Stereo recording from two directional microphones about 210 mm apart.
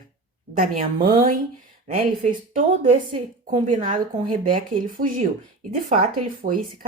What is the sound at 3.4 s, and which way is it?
Speech, 35° right (ahead or behind).